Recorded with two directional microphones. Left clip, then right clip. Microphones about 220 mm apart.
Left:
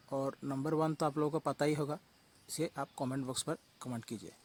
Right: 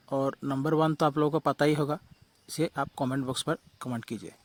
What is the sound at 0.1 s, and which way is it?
Speech, 40° right (ahead or behind).